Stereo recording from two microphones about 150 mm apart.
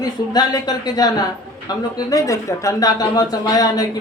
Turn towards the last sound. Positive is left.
turn(degrees=25)  # may be behind; listen again after turning